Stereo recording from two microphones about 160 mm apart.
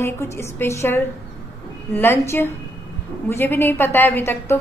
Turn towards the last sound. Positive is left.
turn(degrees=15)  # may be behind; listen again after turning